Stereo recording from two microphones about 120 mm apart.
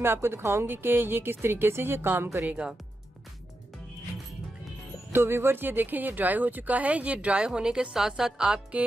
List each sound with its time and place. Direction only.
0.0 s speech: 20° right (ahead or behind)
5.1 s speech: 20° right (ahead or behind)